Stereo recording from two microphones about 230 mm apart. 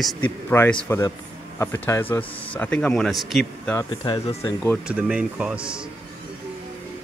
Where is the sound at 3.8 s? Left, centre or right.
Left.